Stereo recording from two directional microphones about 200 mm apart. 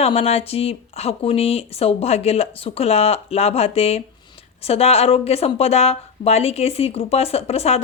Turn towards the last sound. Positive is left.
turn(degrees=30)  # may be behind; listen again after turning